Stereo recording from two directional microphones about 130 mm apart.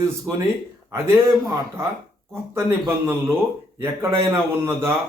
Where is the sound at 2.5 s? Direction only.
20° right (ahead or behind).